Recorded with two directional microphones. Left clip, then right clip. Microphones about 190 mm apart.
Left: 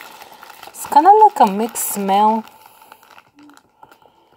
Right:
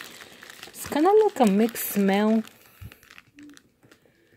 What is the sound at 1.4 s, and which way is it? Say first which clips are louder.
Speech: left 8 dB; 45° right (ahead or behind).